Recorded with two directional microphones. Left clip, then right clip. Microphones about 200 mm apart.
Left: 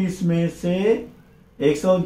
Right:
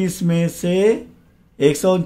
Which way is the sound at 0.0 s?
40° right (ahead or behind).